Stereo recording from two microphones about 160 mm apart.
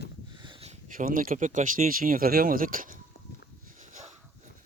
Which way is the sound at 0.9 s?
60° right (ahead or behind).